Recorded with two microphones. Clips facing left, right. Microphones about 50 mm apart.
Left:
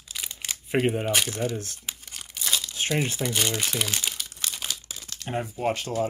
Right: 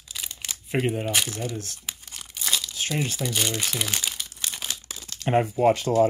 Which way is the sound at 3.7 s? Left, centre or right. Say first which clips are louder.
Even; centre.